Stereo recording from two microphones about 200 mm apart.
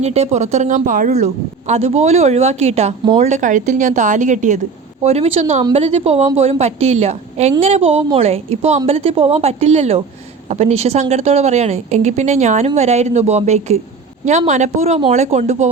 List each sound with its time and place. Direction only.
0.0 s a woman's voice: 35° right (ahead or behind)
3.2 s a woman's voice: 40° right (ahead or behind)